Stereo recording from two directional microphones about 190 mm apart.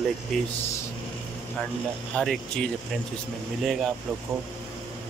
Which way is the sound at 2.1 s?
Centre (ahead or behind).